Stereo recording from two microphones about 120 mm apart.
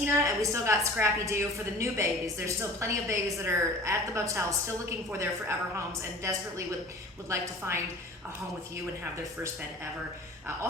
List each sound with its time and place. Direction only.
0.0 s a woman's voice: 25° right (ahead or behind)